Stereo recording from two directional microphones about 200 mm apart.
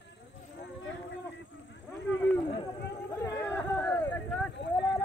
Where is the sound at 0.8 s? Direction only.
65° left (ahead or behind).